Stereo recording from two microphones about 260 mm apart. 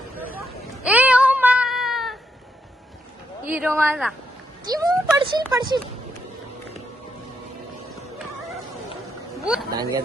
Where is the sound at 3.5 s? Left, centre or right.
Centre.